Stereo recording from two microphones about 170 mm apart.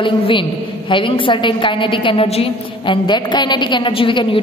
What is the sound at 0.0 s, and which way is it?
A woman's voice, 30° left (ahead or behind).